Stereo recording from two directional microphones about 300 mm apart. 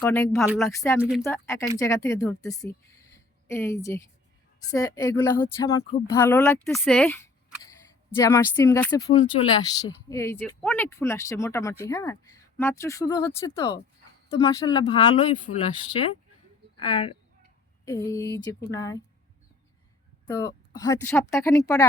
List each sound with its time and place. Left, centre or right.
0.0 s speech: centre
20.2 s speech: centre